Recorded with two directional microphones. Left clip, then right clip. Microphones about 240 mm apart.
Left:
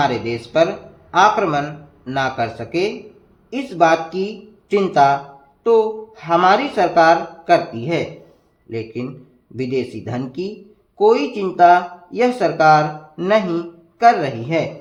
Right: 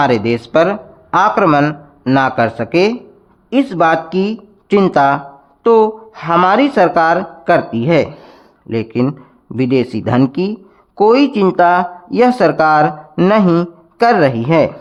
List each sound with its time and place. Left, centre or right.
0.0 s speech: right